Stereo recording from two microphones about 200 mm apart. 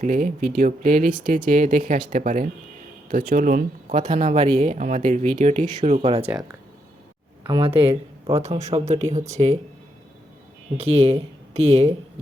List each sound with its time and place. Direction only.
0.0 s speech: 40° right (ahead or behind)
7.4 s speech: 25° right (ahead or behind)
10.8 s speech: 30° right (ahead or behind)